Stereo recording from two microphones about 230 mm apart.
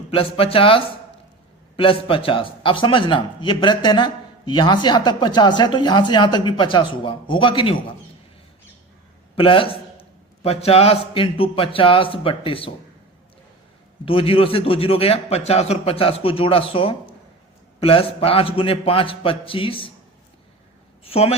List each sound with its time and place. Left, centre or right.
0.1 s a man's voice: left
9.3 s a man's voice: left
14.0 s a man's voice: left
21.0 s a man's voice: left